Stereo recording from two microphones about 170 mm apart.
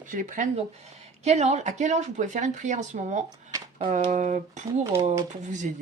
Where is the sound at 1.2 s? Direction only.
40° right (ahead or behind).